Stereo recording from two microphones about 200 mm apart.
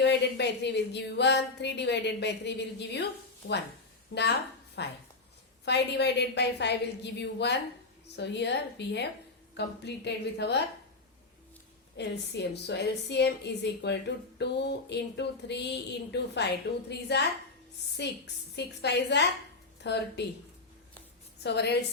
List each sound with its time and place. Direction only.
0.0 s a woman's voice: 60° left (ahead or behind)
11.9 s a woman's voice: 55° left (ahead or behind)
21.4 s a woman's voice: 55° left (ahead or behind)